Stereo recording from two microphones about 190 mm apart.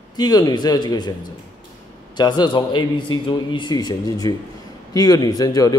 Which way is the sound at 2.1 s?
20° left (ahead or behind).